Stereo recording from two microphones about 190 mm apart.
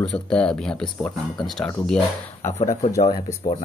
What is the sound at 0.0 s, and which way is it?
Speech, 5° left (ahead or behind).